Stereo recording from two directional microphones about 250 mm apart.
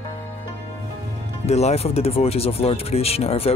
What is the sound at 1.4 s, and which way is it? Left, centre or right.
Speech, left.